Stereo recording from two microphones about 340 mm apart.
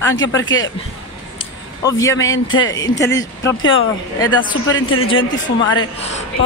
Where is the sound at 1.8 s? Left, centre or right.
Centre.